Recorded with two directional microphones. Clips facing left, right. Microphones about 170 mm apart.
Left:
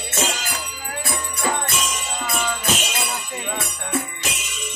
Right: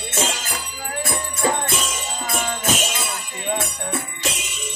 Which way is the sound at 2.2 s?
40° right (ahead or behind).